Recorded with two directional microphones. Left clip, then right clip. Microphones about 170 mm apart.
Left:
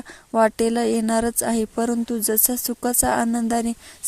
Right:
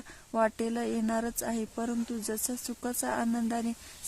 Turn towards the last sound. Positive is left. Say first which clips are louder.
# left 10 dB
turn(degrees=30)  # may be behind; listen again after turning